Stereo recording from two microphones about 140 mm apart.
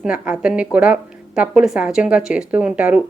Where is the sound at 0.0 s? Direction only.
5° right (ahead or behind).